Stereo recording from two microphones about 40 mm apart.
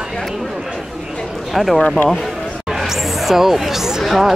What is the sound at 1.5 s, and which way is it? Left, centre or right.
Speech, centre.